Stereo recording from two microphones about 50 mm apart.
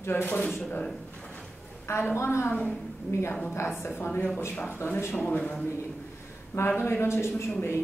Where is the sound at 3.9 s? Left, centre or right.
Left.